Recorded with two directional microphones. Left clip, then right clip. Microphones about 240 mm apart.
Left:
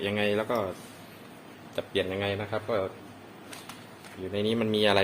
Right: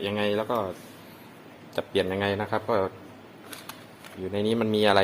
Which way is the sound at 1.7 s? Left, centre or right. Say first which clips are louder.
Right 3 dB; right.